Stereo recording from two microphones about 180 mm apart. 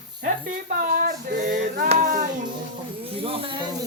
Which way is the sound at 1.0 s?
50° right (ahead or behind).